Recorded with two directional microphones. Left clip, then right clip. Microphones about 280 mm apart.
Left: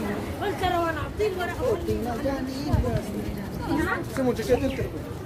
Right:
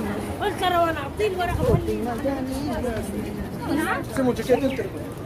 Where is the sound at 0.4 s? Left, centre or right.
Right.